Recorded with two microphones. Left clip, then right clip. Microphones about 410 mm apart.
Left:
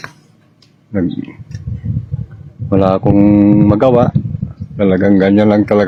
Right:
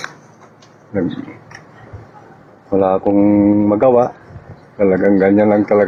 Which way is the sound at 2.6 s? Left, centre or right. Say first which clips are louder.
Left 1 dB; left.